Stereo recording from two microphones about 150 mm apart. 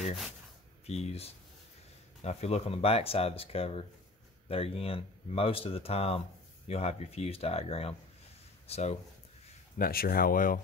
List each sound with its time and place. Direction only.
0.8 s speech: 45° left (ahead or behind)
9.8 s speech: 75° left (ahead or behind)